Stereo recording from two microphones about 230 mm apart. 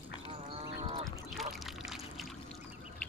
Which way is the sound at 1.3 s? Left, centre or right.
Centre.